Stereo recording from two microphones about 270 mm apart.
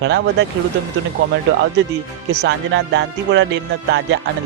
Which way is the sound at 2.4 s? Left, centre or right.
Right.